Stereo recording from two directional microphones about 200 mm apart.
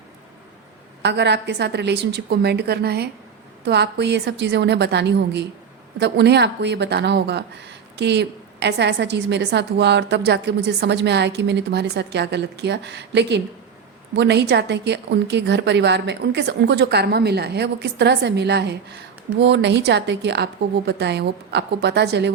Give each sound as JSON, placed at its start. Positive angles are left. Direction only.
{"t": 1.0, "sound": "a woman's voice", "side_deg": -60}